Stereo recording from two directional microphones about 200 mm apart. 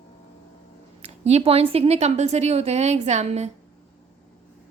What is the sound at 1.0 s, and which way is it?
Speech, 30° right (ahead or behind).